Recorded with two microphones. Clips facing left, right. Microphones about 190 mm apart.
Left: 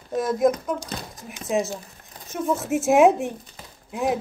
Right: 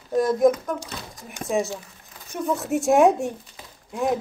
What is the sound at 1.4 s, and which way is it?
Speech, 55° right (ahead or behind).